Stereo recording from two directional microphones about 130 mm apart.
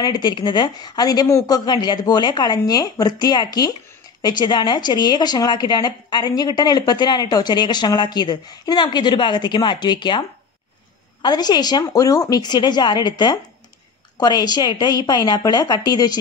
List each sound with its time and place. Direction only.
0.0 s speech: 35° left (ahead or behind)
11.2 s speech: 30° left (ahead or behind)